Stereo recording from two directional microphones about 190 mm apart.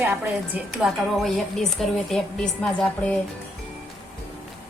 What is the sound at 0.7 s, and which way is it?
A woman's voice, centre (ahead or behind).